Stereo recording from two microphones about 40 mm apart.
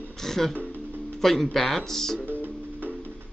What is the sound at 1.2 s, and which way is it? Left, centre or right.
Speech, centre.